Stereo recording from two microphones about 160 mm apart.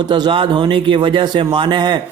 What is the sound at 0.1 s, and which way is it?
A man's voice, 30° right (ahead or behind).